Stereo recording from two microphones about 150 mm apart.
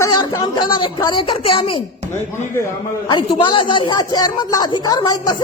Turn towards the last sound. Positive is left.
turn(degrees=25)  # may be behind; listen again after turning